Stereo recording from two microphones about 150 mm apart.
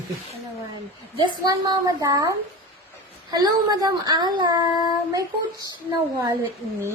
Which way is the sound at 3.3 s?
25° right (ahead or behind).